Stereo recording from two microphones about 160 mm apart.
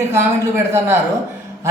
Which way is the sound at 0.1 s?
15° right (ahead or behind).